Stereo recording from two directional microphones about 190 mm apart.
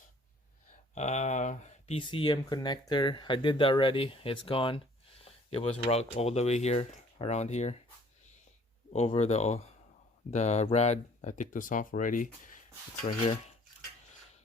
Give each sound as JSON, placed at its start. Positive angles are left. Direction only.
{"t": 0.9, "sound": "speech", "side_deg": 35}
{"t": 8.9, "sound": "speech", "side_deg": 35}